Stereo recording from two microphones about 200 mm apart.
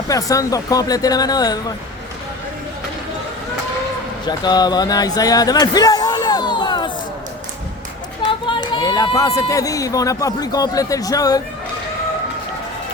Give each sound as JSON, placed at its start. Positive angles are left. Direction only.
{"t": 0.1, "sound": "speech", "side_deg": 15}
{"t": 4.3, "sound": "speech", "side_deg": 20}
{"t": 8.4, "sound": "speech", "side_deg": 20}